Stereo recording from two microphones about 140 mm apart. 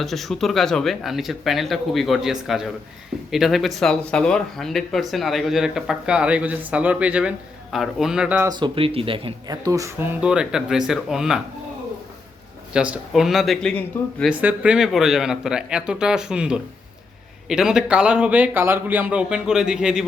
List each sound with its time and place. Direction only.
0.0 s speech: centre (ahead or behind)
8.4 s speech: 35° right (ahead or behind)
9.6 s speech: 20° right (ahead or behind); by 11.3 s 5° right (ahead or behind)
12.7 s speech: 5° right (ahead or behind)
14.3 s speech: 10° right (ahead or behind)